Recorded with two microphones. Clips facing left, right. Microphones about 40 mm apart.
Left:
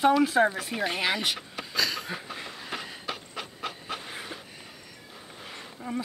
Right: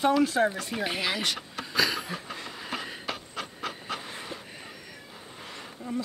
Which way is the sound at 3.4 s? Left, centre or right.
Centre.